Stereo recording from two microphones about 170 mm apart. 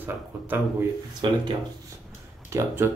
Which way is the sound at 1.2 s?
25° right (ahead or behind).